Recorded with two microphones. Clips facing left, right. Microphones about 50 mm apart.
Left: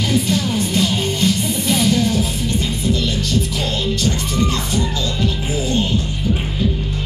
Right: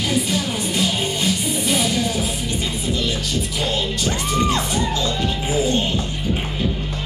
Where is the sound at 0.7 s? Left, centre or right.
Centre.